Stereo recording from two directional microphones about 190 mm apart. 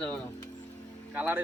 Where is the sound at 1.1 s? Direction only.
10° right (ahead or behind).